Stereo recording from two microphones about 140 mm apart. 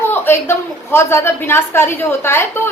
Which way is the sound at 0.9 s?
15° left (ahead or behind).